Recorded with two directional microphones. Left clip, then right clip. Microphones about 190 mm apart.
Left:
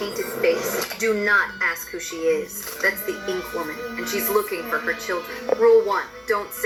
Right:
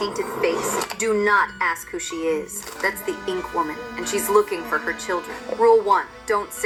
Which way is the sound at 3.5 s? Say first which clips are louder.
Right 3 dB; 30° right (ahead or behind).